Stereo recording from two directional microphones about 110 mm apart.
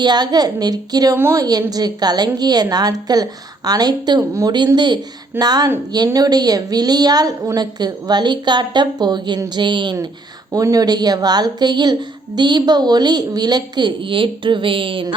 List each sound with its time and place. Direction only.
0.0 s a woman's voice: 40° right (ahead or behind)
1.1 s a woman's voice: 25° right (ahead or behind)
1.7 s a woman's voice: 40° right (ahead or behind)